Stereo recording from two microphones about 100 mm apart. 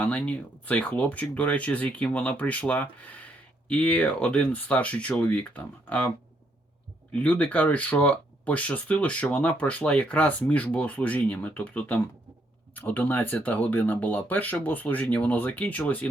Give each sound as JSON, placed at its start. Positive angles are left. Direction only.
{"t": 0.0, "sound": "speech", "side_deg": 15}